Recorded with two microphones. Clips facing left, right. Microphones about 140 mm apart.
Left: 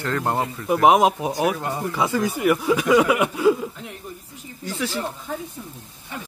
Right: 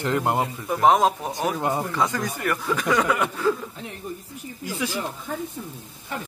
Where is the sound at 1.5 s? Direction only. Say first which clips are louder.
Right 3 dB; 20° right (ahead or behind).